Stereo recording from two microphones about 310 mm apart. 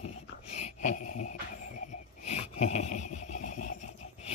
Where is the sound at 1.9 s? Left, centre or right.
Left.